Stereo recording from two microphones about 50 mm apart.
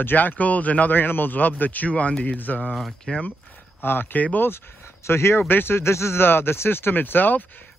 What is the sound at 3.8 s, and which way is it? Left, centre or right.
Speech, left.